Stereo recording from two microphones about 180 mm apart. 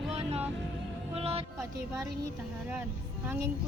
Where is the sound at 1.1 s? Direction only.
35° right (ahead or behind).